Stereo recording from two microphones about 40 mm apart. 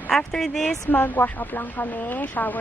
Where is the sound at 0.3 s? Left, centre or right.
Centre.